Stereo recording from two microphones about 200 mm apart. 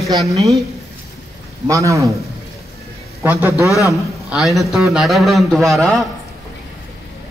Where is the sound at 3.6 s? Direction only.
15° left (ahead or behind).